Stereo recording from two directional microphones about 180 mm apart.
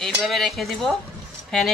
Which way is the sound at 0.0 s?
Centre (ahead or behind).